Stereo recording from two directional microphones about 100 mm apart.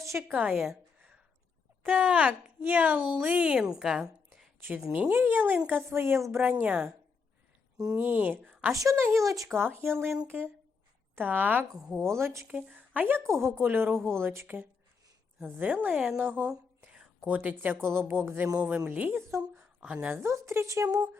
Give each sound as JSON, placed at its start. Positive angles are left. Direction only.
{"t": 0.0, "sound": "a woman's voice", "side_deg": -25}
{"t": 0.5, "sound": "a sound", "side_deg": -5}
{"t": 2.0, "sound": "speech", "side_deg": -10}
{"t": 7.9, "sound": "speech", "side_deg": -20}
{"t": 8.7, "sound": "speech", "side_deg": -35}
{"t": 9.7, "sound": "speech", "side_deg": -20}
{"t": 11.8, "sound": "speech", "side_deg": 0}
{"t": 12.0, "sound": "speech", "side_deg": -25}
{"t": 12.5, "sound": "speech", "side_deg": -15}
{"t": 16.5, "sound": "a sound", "side_deg": -5}
{"t": 17.2, "sound": "speech", "side_deg": -15}
{"t": 19.4, "sound": "a sound", "side_deg": -15}
{"t": 20.2, "sound": "speech", "side_deg": -25}